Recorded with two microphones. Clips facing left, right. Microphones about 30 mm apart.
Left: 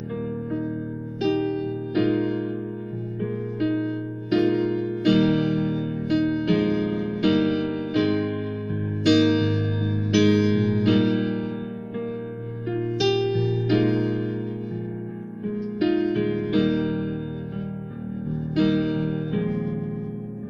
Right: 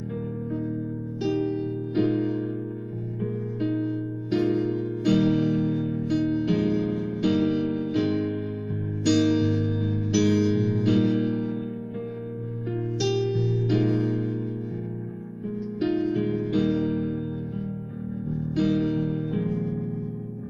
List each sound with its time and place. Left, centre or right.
1.2 s music: left
12.7 s music: left
15.4 s music: left
18.3 s music: left